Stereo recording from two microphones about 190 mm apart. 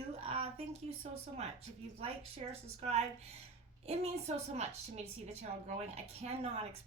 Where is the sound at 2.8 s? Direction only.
35° right (ahead or behind).